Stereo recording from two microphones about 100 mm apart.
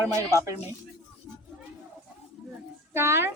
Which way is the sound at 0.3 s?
35° right (ahead or behind).